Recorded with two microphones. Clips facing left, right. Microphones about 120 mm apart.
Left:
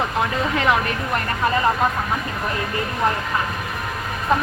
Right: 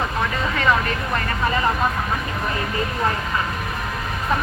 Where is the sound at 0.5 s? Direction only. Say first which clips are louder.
Even; 20° left (ahead or behind).